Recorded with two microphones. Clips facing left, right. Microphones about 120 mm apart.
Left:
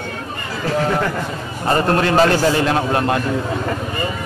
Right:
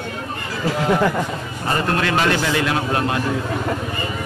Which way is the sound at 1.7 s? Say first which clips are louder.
Left 4 dB; 35° left (ahead or behind).